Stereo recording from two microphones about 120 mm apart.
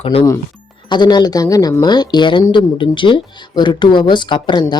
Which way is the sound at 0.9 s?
40° left (ahead or behind).